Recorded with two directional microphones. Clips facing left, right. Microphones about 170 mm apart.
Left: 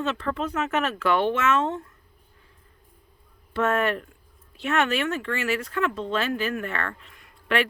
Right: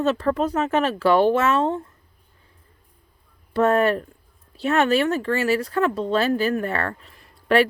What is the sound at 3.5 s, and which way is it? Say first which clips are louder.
Speech: right 5 dB; 35° right (ahead or behind).